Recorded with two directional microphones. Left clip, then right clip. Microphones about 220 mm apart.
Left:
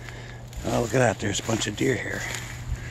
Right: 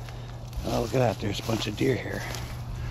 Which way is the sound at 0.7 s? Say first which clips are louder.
Left 3 dB; 20° left (ahead or behind).